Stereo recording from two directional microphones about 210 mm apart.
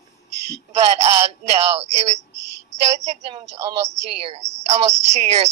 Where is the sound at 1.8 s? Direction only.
30° right (ahead or behind).